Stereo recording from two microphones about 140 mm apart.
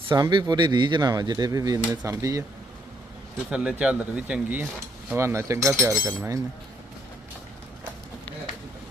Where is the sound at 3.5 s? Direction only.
5° right (ahead or behind).